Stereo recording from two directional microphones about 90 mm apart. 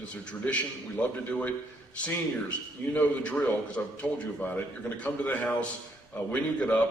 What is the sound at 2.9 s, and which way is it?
A man's voice, 15° left (ahead or behind).